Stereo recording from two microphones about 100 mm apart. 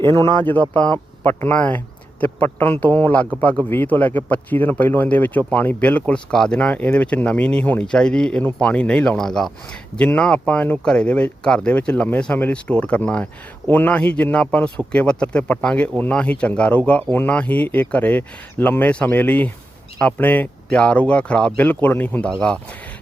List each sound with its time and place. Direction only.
0.4 s speech: 15° left (ahead or behind)